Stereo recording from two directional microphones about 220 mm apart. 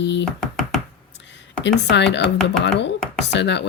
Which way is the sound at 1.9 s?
50° left (ahead or behind).